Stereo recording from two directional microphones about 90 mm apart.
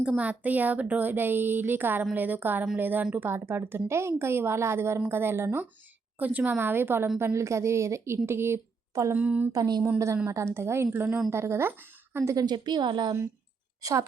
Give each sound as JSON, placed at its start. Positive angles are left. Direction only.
{"t": 0.2, "sound": "a woman's voice", "side_deg": -15}
{"t": 9.1, "sound": "a woman's voice", "side_deg": -15}
{"t": 9.5, "sound": "a woman's voice", "side_deg": -50}
{"t": 10.2, "sound": "a woman's voice", "side_deg": -30}
{"t": 12.4, "sound": "a woman's voice", "side_deg": -55}